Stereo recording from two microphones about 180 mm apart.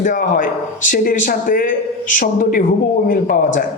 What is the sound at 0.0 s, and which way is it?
A man's voice, 50° left (ahead or behind).